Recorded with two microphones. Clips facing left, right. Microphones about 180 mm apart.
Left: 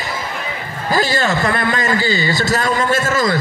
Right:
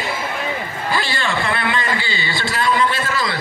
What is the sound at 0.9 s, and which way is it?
A man's voice, 40° left (ahead or behind).